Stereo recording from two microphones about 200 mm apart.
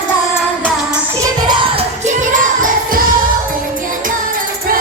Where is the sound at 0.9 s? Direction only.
20° right (ahead or behind).